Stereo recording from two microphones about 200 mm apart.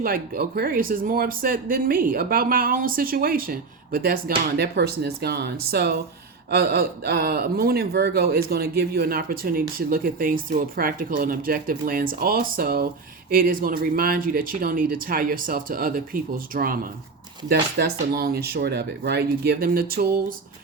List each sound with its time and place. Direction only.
0.0 s speech: 50° right (ahead or behind)